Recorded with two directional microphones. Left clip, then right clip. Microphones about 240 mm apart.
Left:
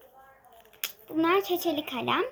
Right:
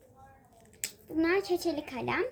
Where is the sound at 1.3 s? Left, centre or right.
Centre.